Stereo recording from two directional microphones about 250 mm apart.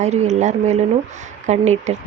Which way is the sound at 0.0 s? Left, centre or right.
Right.